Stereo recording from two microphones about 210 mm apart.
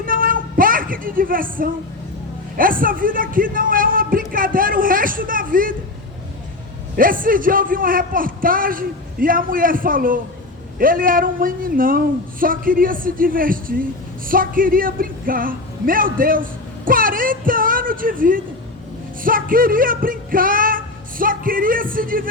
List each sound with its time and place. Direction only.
0.0 s a sound: 40° right (ahead or behind)
2.6 s a man's voice: 40° right (ahead or behind)
6.9 s a man's voice: 40° right (ahead or behind)
19.2 s music: 40° right (ahead or behind)